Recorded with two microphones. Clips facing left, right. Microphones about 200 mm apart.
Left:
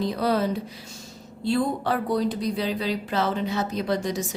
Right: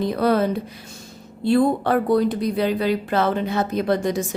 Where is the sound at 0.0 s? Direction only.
55° right (ahead or behind).